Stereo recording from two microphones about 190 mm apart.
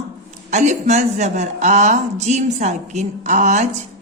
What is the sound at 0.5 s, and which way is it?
A woman's voice, 40° right (ahead or behind).